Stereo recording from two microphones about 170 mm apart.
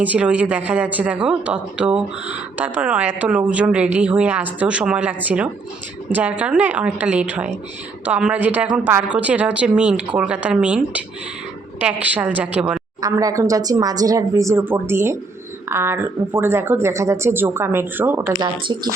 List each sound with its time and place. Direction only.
0.0 s speech: 10° right (ahead or behind)
12.0 s speech: 10° right (ahead or behind)
13.0 s speech: 20° right (ahead or behind)
18.3 s speech: 25° right (ahead or behind)